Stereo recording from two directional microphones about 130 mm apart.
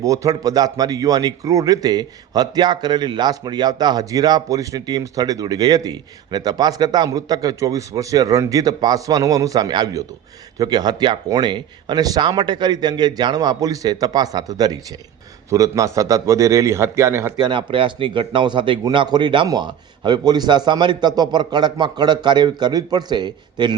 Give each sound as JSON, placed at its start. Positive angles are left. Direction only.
{"t": 0.0, "sound": "a man's voice", "side_deg": -25}
{"t": 17.3, "sound": "speech", "side_deg": -35}